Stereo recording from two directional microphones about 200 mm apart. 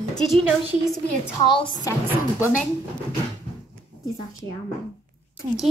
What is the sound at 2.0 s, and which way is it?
Speech, 10° right (ahead or behind).